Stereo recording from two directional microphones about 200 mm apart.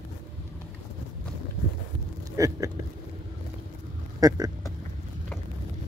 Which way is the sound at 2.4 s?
15° right (ahead or behind).